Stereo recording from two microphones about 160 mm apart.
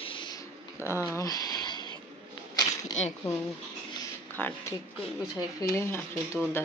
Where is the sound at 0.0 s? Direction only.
30° left (ahead or behind).